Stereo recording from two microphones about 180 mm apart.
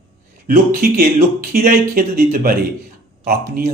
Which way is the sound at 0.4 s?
50° right (ahead or behind).